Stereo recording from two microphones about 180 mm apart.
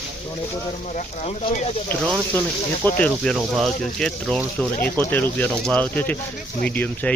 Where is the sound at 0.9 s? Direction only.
40° left (ahead or behind).